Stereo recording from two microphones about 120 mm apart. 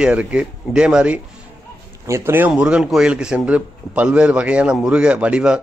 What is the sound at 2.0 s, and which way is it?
A man's voice, 20° right (ahead or behind).